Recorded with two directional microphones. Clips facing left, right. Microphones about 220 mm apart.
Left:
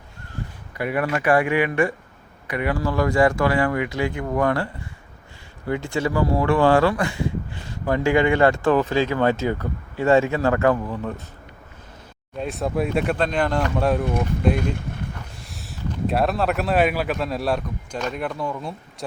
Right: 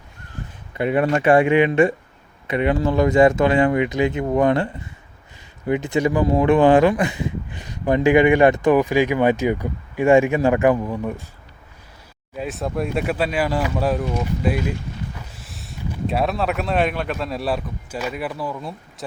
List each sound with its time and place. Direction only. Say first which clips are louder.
0.8 s speech: right 5 dB; 25° right (ahead or behind)
12.4 s speech: left 1 dB; centre (ahead or behind)
15.4 s a sound: even; centre (ahead or behind)
16.0 s speech: even; centre (ahead or behind)